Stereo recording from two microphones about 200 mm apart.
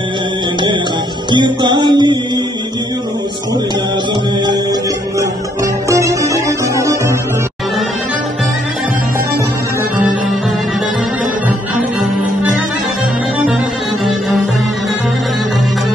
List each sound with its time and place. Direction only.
1.3 s music: 20° right (ahead or behind)
5.2 s music: 15° right (ahead or behind)